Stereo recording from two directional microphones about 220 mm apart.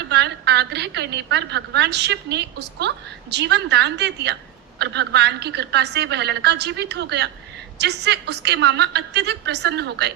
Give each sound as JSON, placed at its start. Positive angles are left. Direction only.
{"t": 0.1, "sound": "a woman's voice", "side_deg": -50}